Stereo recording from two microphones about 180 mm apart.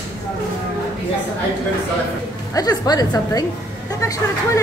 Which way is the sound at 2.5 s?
20° left (ahead or behind).